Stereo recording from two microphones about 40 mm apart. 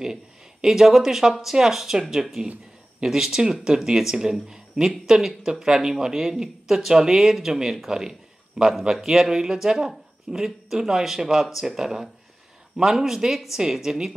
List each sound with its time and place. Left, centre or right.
0.0 s speech: centre
7.9 s a sound: centre
8.9 s speech: centre